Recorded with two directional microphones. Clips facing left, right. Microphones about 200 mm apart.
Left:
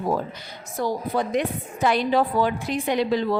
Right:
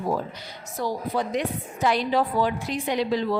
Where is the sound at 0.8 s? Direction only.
55° left (ahead or behind).